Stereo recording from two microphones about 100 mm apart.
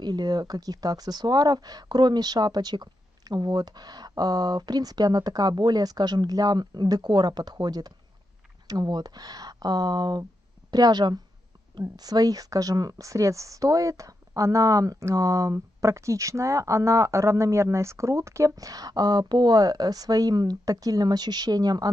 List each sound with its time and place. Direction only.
0.0 s speech: 45° right (ahead or behind)